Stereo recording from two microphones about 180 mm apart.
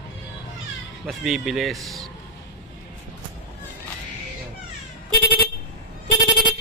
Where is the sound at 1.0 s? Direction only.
Centre (ahead or behind).